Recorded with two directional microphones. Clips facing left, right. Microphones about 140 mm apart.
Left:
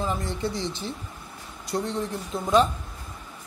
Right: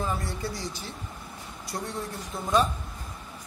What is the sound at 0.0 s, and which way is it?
Speech, 20° left (ahead or behind).